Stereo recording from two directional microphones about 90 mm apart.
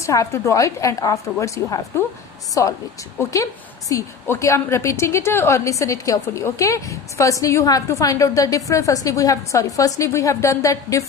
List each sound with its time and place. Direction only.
0.0 s a woman's voice: 35° left (ahead or behind)